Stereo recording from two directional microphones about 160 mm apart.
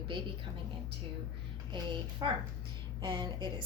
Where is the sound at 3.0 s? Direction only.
30° right (ahead or behind).